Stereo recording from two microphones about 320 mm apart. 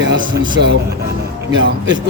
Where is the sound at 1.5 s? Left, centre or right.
Right.